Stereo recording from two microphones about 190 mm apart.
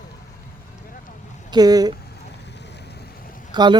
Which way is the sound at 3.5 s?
25° right (ahead or behind).